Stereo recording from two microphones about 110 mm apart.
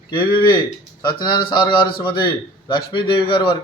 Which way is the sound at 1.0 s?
40° left (ahead or behind).